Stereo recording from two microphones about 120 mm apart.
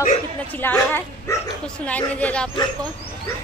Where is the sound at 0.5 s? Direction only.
15° left (ahead or behind).